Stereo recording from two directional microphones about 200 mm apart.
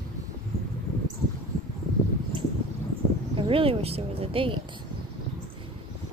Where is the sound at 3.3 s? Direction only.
25° right (ahead or behind).